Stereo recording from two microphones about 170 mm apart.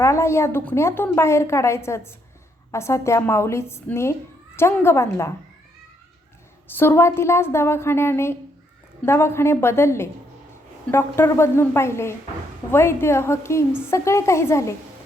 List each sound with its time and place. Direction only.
0.0 s a woman's voice: 15° left (ahead or behind)
6.7 s a woman's voice: 15° left (ahead or behind)